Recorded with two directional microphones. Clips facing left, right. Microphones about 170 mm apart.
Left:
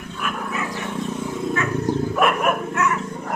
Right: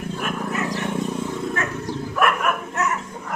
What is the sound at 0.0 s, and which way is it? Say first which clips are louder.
Wild animals: right 2 dB; 40° right (ahead or behind).